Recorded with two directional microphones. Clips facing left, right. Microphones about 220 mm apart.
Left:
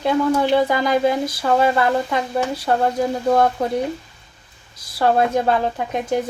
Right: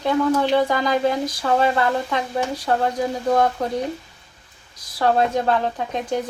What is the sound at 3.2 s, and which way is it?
Speech, 5° left (ahead or behind).